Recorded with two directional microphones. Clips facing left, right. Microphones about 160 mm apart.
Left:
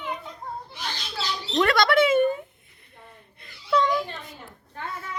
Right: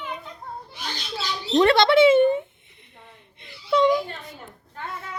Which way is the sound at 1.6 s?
25° right (ahead or behind).